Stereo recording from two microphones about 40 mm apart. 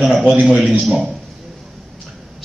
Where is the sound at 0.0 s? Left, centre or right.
Centre.